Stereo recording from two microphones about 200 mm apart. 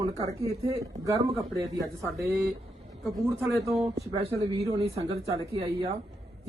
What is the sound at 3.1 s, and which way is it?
Speech, centre (ahead or behind).